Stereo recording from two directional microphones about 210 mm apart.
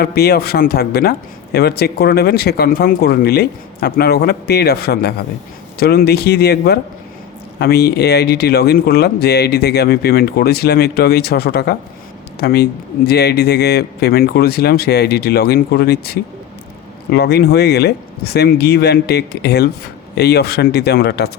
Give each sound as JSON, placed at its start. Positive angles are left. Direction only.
{"t": 0.0, "sound": "speech", "side_deg": 50}